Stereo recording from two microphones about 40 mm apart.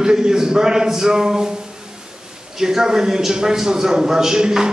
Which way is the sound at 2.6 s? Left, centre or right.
Centre.